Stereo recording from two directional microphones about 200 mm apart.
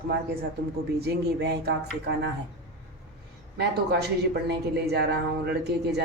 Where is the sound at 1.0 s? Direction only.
55° right (ahead or behind).